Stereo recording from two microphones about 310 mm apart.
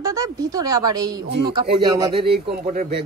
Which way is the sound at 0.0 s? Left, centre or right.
Centre.